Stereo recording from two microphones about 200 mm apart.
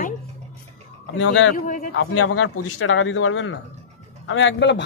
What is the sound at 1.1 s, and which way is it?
Speech, 70° left (ahead or behind).